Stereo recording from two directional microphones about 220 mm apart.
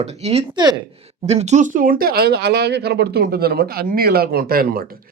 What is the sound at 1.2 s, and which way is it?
Speech, 30° right (ahead or behind).